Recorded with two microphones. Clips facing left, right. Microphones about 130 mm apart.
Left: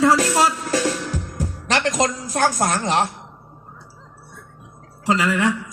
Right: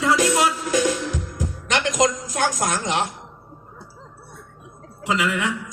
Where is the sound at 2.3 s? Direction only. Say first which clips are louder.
Left 3 dB; 30° left (ahead or behind).